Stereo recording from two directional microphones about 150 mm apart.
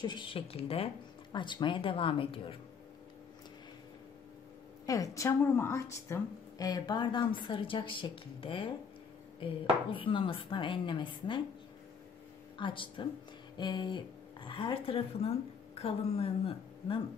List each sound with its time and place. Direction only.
0.0 s a woman's voice: 35° left (ahead or behind)
4.8 s a woman's voice: 25° left (ahead or behind)
12.5 s a woman's voice: 35° left (ahead or behind)